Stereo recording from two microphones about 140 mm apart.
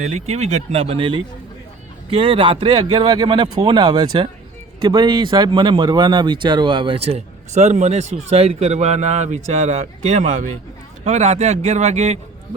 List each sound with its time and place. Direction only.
0.0 s speech: 55° right (ahead or behind)
3.8 s speech: 30° right (ahead or behind); by 12.2 s 55° right (ahead or behind)